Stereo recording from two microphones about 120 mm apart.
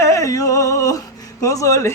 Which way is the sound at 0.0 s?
25° left (ahead or behind).